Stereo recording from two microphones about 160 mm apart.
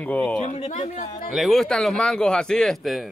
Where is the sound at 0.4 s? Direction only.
50° left (ahead or behind).